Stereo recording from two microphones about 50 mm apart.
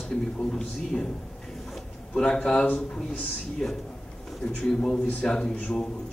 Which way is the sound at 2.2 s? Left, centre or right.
Centre.